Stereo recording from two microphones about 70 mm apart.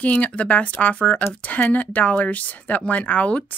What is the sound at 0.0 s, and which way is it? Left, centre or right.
Speech, left.